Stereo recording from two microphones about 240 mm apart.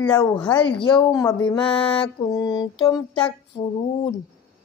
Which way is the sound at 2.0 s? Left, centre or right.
Centre.